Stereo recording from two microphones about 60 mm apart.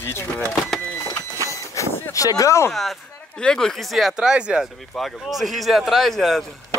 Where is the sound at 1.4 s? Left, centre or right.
Left.